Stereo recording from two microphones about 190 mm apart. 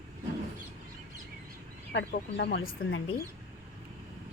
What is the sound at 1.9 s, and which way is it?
Speech, 65° left (ahead or behind).